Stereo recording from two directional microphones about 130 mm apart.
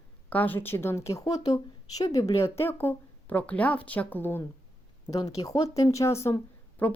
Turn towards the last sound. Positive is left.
turn(degrees=15)  # may be behind; listen again after turning